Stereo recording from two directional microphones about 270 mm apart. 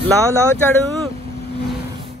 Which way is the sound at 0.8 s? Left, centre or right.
Centre.